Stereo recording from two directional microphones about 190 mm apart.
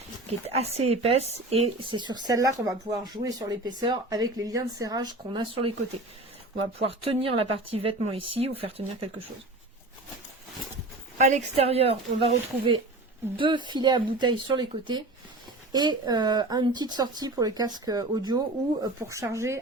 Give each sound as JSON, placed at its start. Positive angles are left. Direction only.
{"t": 0.3, "sound": "speech", "side_deg": -35}
{"t": 6.7, "sound": "speech", "side_deg": -30}
{"t": 11.2, "sound": "speech", "side_deg": -35}